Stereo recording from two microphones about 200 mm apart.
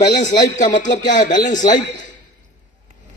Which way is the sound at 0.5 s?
40° left (ahead or behind).